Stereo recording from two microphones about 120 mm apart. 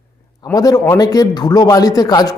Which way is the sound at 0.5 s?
30° left (ahead or behind).